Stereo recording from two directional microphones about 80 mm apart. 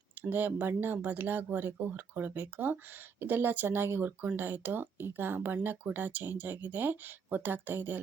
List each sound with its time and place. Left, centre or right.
0.2 s speech: right